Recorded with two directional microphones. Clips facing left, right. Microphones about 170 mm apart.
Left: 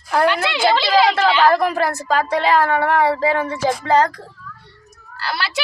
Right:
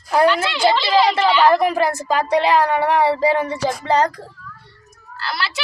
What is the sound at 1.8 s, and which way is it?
Speech, 10° right (ahead or behind).